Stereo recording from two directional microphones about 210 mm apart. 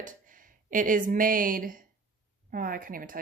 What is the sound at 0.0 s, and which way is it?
Speech, 40° right (ahead or behind).